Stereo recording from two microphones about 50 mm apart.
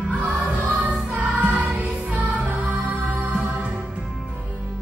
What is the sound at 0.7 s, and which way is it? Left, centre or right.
Music, right.